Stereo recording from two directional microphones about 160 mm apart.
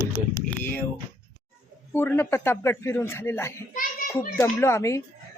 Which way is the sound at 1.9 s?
15° left (ahead or behind).